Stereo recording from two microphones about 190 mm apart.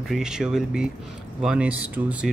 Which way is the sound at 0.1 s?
5° right (ahead or behind).